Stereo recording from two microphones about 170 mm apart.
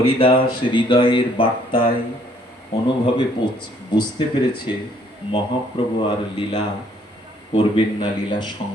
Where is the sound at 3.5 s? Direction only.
25° left (ahead or behind).